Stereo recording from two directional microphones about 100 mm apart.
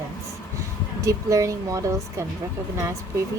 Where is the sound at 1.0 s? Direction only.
30° right (ahead or behind).